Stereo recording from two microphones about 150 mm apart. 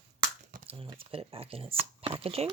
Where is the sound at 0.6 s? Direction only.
40° right (ahead or behind).